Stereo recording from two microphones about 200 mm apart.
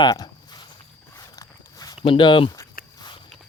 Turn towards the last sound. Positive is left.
turn(degrees=20)  # may be behind; listen again after turning